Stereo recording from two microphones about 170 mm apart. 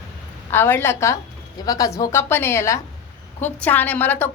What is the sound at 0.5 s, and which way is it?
A woman's voice, 15° left (ahead or behind).